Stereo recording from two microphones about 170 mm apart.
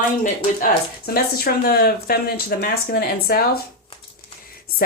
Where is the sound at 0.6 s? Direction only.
60° left (ahead or behind).